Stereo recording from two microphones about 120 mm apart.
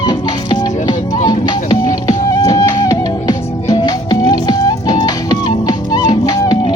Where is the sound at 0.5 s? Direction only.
35° left (ahead or behind).